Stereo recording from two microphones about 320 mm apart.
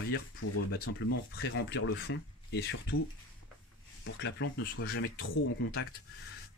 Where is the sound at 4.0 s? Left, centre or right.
Left.